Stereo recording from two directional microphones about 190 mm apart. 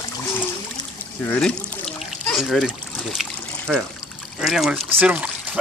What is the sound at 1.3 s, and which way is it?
Speech, 5° left (ahead or behind).